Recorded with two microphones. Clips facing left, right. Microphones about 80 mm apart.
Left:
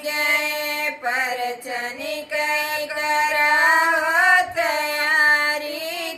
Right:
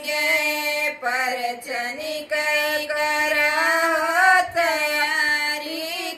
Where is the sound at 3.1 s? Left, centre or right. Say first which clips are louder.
Left 6 dB; left.